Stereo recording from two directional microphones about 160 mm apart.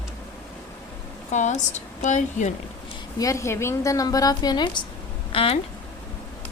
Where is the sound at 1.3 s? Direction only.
45° left (ahead or behind).